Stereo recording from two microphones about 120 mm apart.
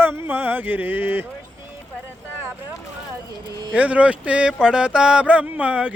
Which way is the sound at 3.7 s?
10° right (ahead or behind).